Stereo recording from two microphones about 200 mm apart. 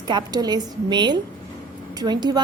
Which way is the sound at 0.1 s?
20° right (ahead or behind).